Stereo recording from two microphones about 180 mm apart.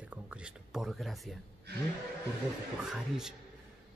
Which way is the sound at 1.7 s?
65° right (ahead or behind).